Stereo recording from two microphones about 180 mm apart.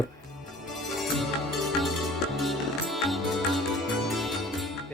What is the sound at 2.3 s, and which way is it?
Music, centre (ahead or behind).